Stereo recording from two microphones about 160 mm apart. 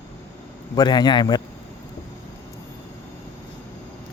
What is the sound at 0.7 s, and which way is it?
Speech, 25° left (ahead or behind).